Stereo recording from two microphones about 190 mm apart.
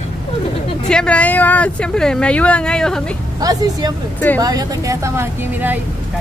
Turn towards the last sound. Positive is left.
turn(degrees=-10)  # may be behind; listen again after turning